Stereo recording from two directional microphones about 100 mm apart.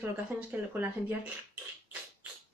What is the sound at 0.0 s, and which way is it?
Speech, 15° right (ahead or behind).